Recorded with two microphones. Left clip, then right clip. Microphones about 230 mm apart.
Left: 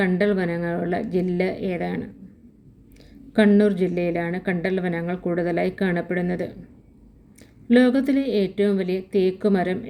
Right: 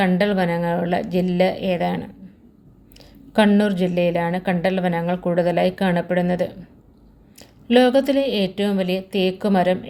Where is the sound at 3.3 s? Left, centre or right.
Right.